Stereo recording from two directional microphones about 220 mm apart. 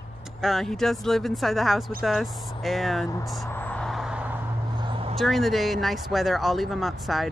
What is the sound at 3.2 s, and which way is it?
Vehicle, centre (ahead or behind).